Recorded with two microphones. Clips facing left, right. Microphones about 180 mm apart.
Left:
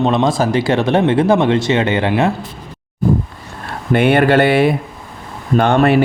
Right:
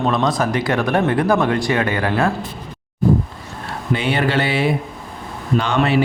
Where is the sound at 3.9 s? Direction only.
55° left (ahead or behind).